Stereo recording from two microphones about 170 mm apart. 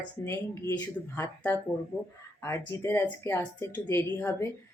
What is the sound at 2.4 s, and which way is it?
Speech, 15° left (ahead or behind).